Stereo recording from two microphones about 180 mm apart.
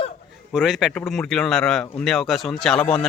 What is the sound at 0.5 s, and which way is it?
Speech, 5° right (ahead or behind).